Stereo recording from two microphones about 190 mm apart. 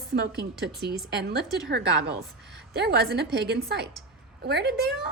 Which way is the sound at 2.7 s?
60° right (ahead or behind).